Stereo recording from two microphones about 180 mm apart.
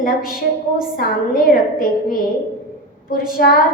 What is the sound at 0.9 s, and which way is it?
A woman's voice, 50° left (ahead or behind).